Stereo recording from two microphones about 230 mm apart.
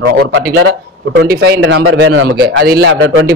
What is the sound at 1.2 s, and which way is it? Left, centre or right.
A man's voice, right.